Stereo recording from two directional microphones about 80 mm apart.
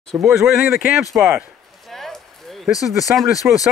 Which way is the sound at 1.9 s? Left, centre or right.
Centre.